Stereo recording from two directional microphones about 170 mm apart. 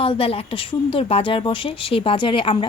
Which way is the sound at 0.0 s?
35° left (ahead or behind).